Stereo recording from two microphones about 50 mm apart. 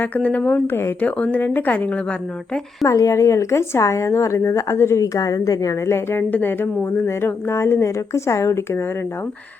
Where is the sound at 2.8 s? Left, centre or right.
Left.